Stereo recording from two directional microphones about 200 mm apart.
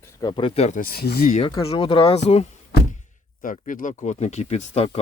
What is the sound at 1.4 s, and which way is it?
Speech, 25° left (ahead or behind).